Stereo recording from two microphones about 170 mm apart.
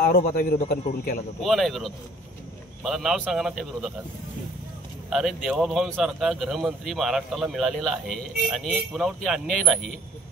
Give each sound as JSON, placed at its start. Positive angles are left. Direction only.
{"t": 0.0, "sound": "a man's voice", "side_deg": 55}
{"t": 1.4, "sound": "a man's voice", "side_deg": 0}
{"t": 5.1, "sound": "a man's voice", "side_deg": 0}